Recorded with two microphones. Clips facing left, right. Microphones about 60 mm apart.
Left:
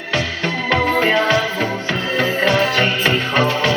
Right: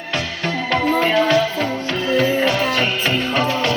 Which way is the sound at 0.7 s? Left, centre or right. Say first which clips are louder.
Left 1 dB; centre.